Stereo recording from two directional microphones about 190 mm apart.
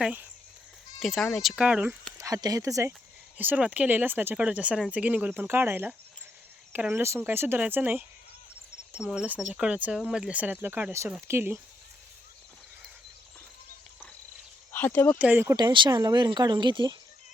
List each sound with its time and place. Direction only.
0.0 s speech: 10° right (ahead or behind)
14.7 s speech: 10° left (ahead or behind)
15.2 s speech: 10° right (ahead or behind)